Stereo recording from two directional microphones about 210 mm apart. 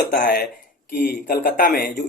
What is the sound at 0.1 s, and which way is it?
A man's voice, 40° left (ahead or behind).